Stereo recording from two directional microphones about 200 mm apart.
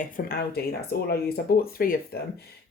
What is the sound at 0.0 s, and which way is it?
Speech, 45° left (ahead or behind).